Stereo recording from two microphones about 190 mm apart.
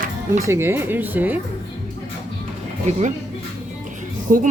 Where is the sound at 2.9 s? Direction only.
35° right (ahead or behind).